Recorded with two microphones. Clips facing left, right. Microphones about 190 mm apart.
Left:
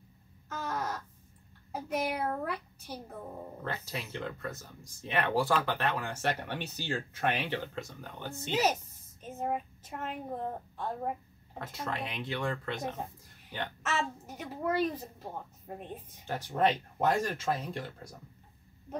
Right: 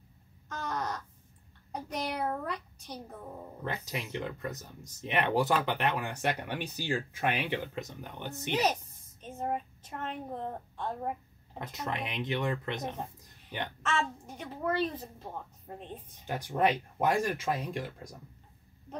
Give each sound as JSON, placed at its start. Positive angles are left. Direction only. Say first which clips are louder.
{"t": 0.5, "sound": "crow", "louder": "even", "side_deg": 5}
{"t": 1.7, "sound": "a child's voice", "louder": "left 3 dB", "side_deg": 5}
{"t": 3.6, "sound": "speech", "louder": "right 2 dB", "side_deg": -15}
{"t": 9.2, "sound": "a woman's voice", "louder": "even", "side_deg": 5}
{"t": 11.5, "sound": "speech", "louder": "right 1 dB", "side_deg": -20}
{"t": 13.8, "sound": "a child's voice", "louder": "right 2 dB", "side_deg": 5}
{"t": 16.3, "sound": "speech", "louder": "even", "side_deg": -10}